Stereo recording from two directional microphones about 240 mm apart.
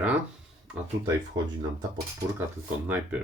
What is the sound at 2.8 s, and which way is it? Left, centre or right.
Speech, centre.